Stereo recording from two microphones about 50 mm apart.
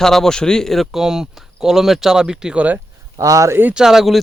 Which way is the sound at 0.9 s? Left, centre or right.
Centre.